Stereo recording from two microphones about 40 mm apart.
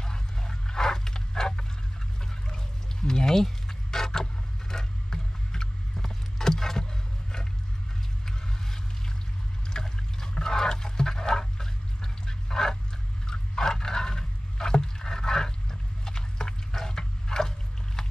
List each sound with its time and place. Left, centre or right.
0.0 s dog: centre
2.5 s vehicle: centre
9.7 s water: centre
13.3 s rowboat: centre
16.7 s a sound: centre